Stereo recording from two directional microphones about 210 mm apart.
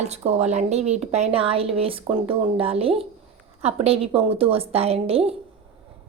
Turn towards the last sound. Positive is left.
turn(degrees=-30)  # may be behind; listen again after turning